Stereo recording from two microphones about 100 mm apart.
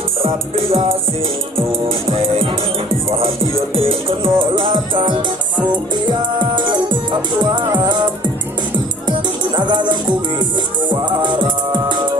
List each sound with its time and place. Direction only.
0.2 s music: 75° right (ahead or behind)
3.7 s music: 70° right (ahead or behind); by 12.1 s 50° right (ahead or behind)